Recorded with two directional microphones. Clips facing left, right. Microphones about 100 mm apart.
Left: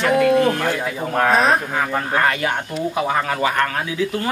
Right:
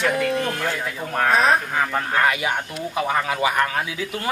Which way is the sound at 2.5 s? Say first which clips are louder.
Left 3 dB; 5° left (ahead or behind).